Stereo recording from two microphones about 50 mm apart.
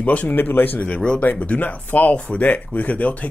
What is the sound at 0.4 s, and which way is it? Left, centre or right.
Speech, left.